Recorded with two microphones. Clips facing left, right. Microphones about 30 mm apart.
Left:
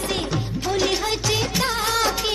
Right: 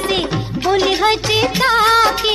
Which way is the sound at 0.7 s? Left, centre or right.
Right.